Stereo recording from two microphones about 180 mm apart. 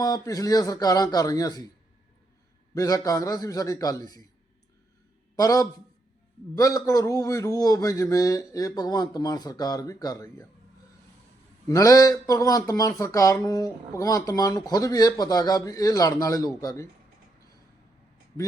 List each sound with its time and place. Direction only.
0.0 s speech: 20° left (ahead or behind)
2.7 s speech: 20° left (ahead or behind)
5.4 s speech: 20° left (ahead or behind)
11.7 s speech: 20° left (ahead or behind)